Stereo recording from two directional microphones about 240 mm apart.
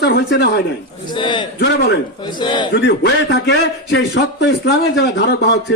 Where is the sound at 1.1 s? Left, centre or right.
Centre.